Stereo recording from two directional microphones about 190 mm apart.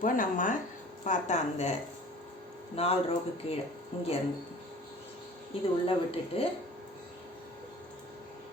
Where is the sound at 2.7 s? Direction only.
30° left (ahead or behind).